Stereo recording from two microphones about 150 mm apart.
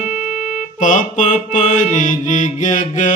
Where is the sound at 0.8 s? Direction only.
60° left (ahead or behind).